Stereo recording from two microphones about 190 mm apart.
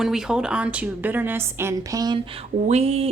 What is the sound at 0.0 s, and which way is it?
A woman's voice, 5° right (ahead or behind).